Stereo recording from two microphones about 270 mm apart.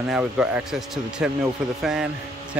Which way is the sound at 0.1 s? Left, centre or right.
Centre.